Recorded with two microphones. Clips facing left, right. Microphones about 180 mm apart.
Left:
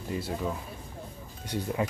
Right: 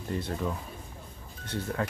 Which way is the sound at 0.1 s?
5° left (ahead or behind).